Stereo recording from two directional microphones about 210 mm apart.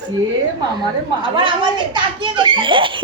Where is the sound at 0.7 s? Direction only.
25° right (ahead or behind).